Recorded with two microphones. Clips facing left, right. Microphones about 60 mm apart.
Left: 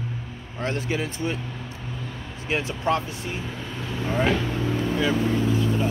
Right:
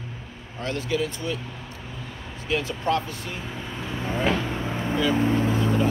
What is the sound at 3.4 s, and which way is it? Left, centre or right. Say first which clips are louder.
Speech: left 1 dB; centre.